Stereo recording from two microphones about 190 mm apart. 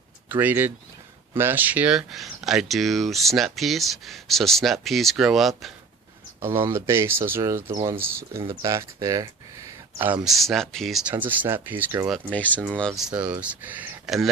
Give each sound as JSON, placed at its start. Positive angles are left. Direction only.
{"t": 0.3, "sound": "speech", "side_deg": -10}
{"t": 6.7, "sound": "speech", "side_deg": -15}
{"t": 11.1, "sound": "speech", "side_deg": -10}
{"t": 12.1, "sound": "speech", "side_deg": 5}